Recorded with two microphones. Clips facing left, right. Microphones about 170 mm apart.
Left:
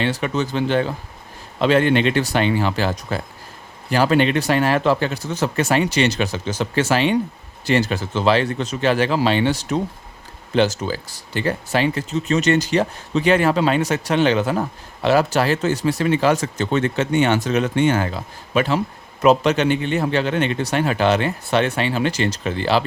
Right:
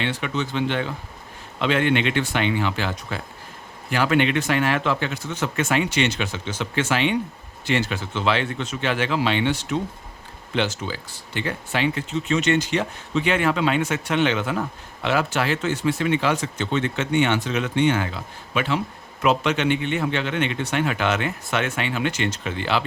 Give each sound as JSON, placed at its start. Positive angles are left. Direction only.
{"t": 0.0, "sound": "speech", "side_deg": 40}